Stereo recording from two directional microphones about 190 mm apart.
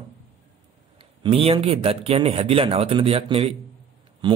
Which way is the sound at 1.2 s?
30° right (ahead or behind).